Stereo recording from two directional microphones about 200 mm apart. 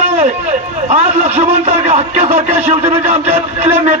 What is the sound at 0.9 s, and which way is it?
A man's voice, 35° right (ahead or behind).